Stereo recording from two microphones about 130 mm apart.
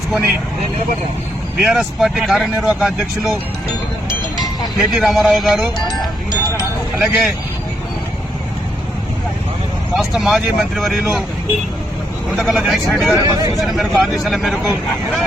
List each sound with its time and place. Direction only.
0.1 s speech: 5° right (ahead or behind)
1.6 s speech: centre (ahead or behind)
4.8 s speech: centre (ahead or behind)
5.9 s music: 30° left (ahead or behind)
7.0 s speech: 10° right (ahead or behind)
10.0 s speech: centre (ahead or behind)
12.4 s speech: 5° right (ahead or behind)
13.1 s speech: 30° right (ahead or behind)
13.6 s speech: centre (ahead or behind)